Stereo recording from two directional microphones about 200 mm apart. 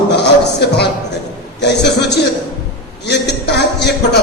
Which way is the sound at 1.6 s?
55° left (ahead or behind).